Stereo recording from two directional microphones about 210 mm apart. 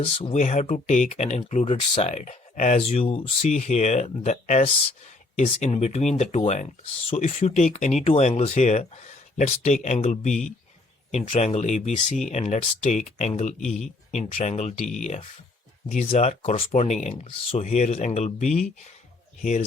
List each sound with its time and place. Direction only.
0.0 s speech: 30° left (ahead or behind)